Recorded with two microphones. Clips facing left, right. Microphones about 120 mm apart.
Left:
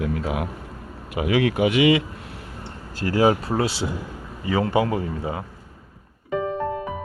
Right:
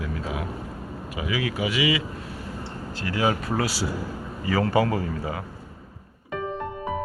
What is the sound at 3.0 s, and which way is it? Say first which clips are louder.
A man's voice: left 6 dB; 40° left (ahead or behind).